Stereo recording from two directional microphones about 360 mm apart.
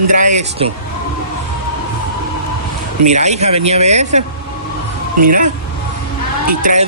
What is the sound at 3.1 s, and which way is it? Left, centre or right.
Speech, centre.